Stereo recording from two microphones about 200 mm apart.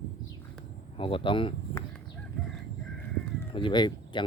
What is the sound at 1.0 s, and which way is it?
Speech, 25° left (ahead or behind).